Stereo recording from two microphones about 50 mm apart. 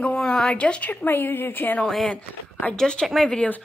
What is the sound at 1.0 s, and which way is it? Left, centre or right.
Speech, left.